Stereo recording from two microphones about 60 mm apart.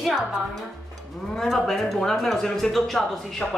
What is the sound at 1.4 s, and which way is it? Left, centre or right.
A woman's voice, centre.